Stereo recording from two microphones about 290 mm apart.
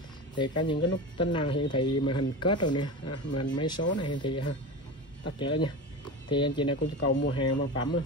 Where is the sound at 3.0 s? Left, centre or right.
Left.